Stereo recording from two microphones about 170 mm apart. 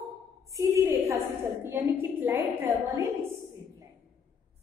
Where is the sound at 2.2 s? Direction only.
10° right (ahead or behind).